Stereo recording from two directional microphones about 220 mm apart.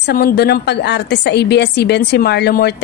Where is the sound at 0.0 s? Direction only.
45° left (ahead or behind).